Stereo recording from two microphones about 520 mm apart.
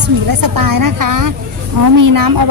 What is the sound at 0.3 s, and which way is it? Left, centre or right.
Speech, right.